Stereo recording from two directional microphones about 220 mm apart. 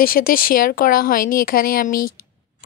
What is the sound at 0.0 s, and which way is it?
Speech, 40° left (ahead or behind).